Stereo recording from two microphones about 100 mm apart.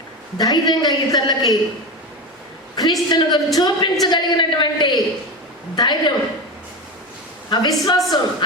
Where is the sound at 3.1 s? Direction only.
45° left (ahead or behind).